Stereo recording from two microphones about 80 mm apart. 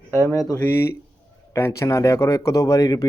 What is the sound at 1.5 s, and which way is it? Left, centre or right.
Speech, left.